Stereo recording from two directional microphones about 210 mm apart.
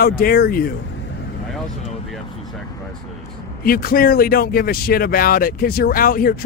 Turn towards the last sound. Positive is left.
turn(degrees=45)  # may be behind; listen again after turning